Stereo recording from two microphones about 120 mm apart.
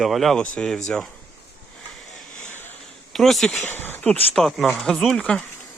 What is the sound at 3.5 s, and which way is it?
Speech, 15° left (ahead or behind).